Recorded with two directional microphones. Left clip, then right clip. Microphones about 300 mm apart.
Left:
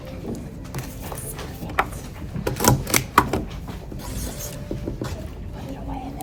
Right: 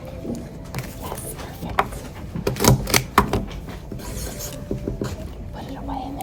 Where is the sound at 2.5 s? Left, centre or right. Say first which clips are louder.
Right 1 dB; right.